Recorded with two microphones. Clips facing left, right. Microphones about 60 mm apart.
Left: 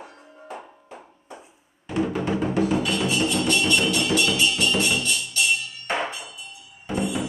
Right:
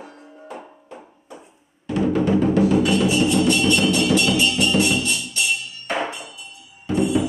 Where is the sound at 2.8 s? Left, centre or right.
Centre.